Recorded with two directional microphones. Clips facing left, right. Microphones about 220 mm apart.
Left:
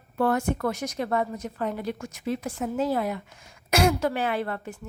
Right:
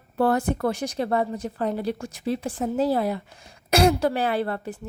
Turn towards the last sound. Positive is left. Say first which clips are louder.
# right 3 dB
turn(degrees=-35)  # may be behind; listen again after turning